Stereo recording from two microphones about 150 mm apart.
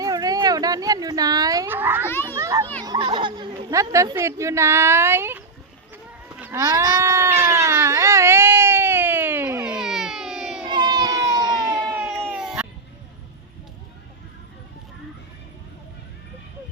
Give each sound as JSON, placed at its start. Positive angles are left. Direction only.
{"t": 0.0, "sound": "speech", "side_deg": -25}
{"t": 1.7, "sound": "a child's voice", "side_deg": -15}
{"t": 2.0, "sound": "children playing", "side_deg": 15}
{"t": 2.3, "sound": "children playing", "side_deg": -20}
{"t": 2.8, "sound": "speech", "side_deg": -30}
{"t": 6.2, "sound": "a sound", "side_deg": -10}
{"t": 6.6, "sound": "baby cry", "side_deg": -20}
{"t": 10.7, "sound": "baby cry", "side_deg": -30}
{"t": 11.5, "sound": "a sound", "side_deg": 0}